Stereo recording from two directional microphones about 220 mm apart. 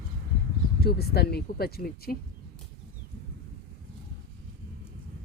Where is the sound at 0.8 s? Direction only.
45° left (ahead or behind).